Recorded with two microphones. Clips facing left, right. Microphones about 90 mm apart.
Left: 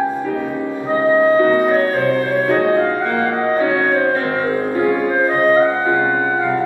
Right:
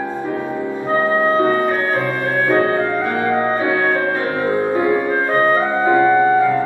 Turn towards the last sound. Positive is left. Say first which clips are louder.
# left 2 dB
turn(degrees=-20)  # may be behind; listen again after turning